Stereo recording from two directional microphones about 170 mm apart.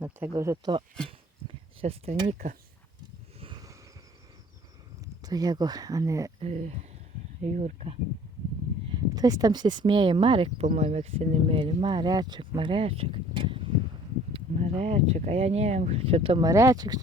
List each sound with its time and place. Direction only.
0.0 s speech: 15° right (ahead or behind)
1.8 s speech: 35° right (ahead or behind)
3.4 s a sound: 25° right (ahead or behind)
5.2 s speech: 20° right (ahead or behind)
6.4 s speech: 40° right (ahead or behind)
8.9 s speech: 20° right (ahead or behind)
14.5 s speech: 40° right (ahead or behind); by 17.0 s 20° right (ahead or behind)